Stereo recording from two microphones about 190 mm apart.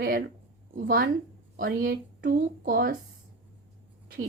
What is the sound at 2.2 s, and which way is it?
Speech, 55° right (ahead or behind).